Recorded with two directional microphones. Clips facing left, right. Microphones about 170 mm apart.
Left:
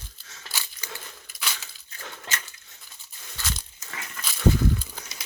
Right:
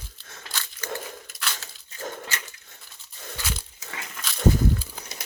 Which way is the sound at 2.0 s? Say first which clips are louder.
Right 7 dB; 40° right (ahead or behind).